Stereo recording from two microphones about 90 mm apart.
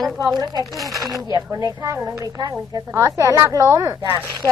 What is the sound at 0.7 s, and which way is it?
Speech, centre (ahead or behind).